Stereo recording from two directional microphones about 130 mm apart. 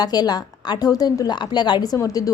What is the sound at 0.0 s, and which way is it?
A woman's voice, 30° left (ahead or behind).